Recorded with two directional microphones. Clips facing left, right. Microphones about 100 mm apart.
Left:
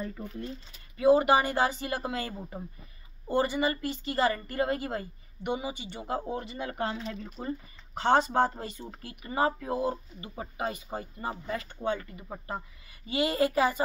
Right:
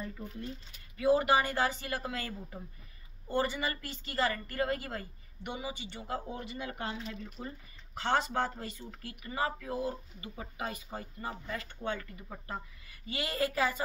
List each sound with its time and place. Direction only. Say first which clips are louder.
0.9 s speech: left 5 dB; 25° left (ahead or behind)
6.3 s speech: left 5 dB; 35° left (ahead or behind)